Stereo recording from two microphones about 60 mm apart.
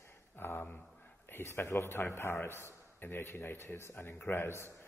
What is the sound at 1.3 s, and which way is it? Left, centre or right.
A man's voice, left.